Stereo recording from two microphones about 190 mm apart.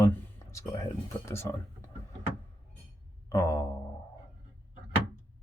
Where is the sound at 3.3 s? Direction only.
15° left (ahead or behind).